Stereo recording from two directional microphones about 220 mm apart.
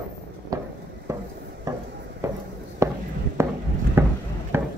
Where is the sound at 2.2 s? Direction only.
15° right (ahead or behind).